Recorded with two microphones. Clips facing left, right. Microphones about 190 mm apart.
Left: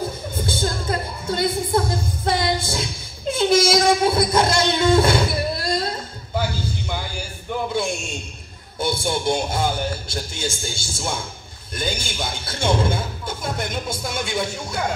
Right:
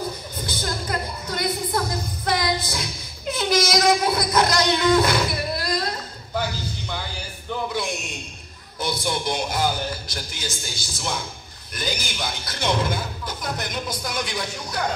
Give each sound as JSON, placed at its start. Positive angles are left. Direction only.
{"t": 0.4, "sound": "music", "side_deg": 25}
{"t": 7.7, "sound": "a sound", "side_deg": 25}
{"t": 8.7, "sound": "speech", "side_deg": 25}